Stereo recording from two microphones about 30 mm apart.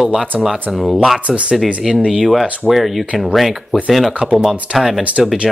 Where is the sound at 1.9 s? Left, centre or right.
Centre.